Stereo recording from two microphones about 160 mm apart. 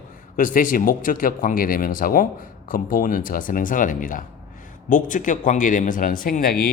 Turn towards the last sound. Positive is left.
turn(degrees=70)  # may be behind; listen again after turning